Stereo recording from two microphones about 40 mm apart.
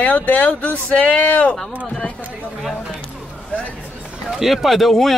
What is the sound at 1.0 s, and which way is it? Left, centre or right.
Speech, left.